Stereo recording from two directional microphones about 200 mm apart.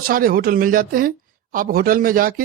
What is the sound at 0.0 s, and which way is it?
Speech, 45° right (ahead or behind).